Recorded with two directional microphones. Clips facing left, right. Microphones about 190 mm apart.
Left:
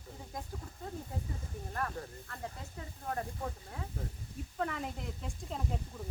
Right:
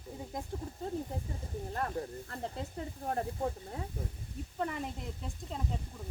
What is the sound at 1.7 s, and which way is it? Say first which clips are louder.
Speech: right 3 dB; 25° right (ahead or behind).